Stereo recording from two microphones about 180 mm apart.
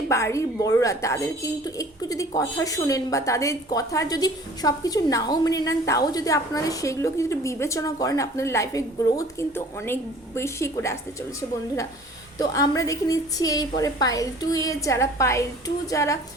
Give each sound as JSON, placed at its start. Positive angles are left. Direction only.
{"t": 0.1, "sound": "speech", "side_deg": 15}
{"t": 12.4, "sound": "a woman's voice", "side_deg": 20}